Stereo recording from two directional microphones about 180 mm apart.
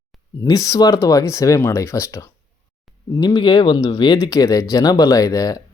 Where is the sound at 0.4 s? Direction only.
20° left (ahead or behind).